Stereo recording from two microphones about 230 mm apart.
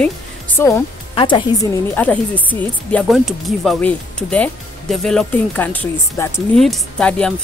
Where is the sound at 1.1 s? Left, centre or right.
Left.